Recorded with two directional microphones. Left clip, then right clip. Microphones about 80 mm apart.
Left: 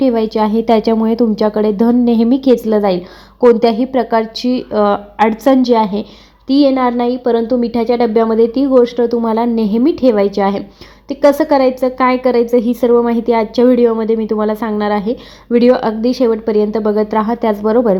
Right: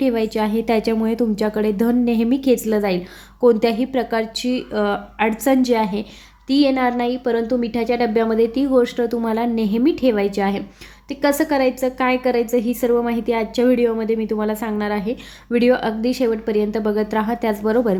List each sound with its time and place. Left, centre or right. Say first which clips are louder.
0.0 s a woman's voice: left 6 dB; centre
9.2 s a woman's voice: left 6 dB; centre